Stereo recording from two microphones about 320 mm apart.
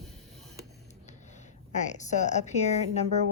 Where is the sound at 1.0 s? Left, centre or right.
Left.